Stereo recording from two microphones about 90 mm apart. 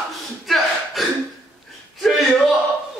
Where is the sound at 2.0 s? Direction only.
Centre (ahead or behind).